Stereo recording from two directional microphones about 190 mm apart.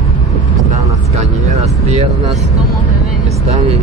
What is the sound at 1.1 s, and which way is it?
Speech, 35° right (ahead or behind).